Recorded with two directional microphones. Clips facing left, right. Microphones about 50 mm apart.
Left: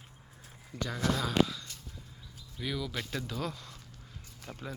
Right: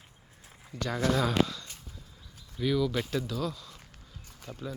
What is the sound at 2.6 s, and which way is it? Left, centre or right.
Speech, centre.